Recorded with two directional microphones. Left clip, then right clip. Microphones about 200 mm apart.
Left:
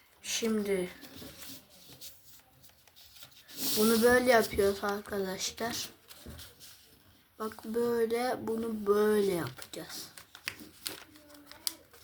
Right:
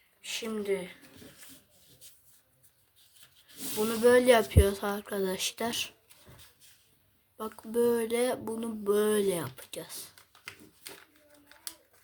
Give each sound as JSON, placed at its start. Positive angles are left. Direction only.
{"t": 0.3, "sound": "speech", "side_deg": -55}
{"t": 3.8, "sound": "speech", "side_deg": -55}
{"t": 7.3, "sound": "speech", "side_deg": -60}